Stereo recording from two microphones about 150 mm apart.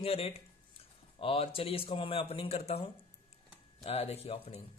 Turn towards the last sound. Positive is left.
turn(degrees=45)  # may be behind; listen again after turning